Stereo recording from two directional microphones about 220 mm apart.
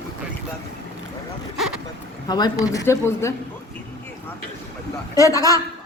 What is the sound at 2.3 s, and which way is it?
A woman's voice, 20° left (ahead or behind).